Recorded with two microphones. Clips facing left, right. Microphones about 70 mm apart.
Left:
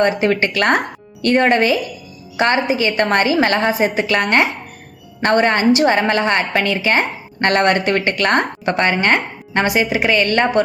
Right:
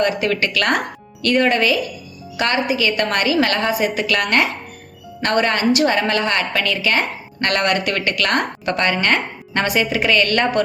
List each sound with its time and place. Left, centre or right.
0.0 s a woman's voice: left